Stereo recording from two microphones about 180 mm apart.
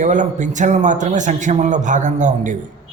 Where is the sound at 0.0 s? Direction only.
45° right (ahead or behind).